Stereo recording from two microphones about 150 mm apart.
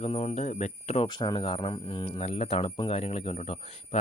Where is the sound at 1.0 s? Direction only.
30° left (ahead or behind).